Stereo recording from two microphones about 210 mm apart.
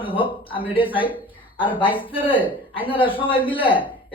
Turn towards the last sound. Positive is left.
turn(degrees=25)  # may be behind; listen again after turning